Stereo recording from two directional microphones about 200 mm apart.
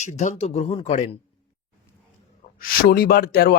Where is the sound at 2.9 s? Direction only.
50° left (ahead or behind).